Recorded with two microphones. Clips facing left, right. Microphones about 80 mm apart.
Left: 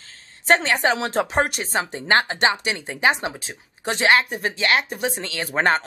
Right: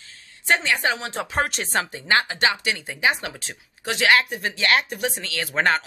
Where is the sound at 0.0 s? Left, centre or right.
Left.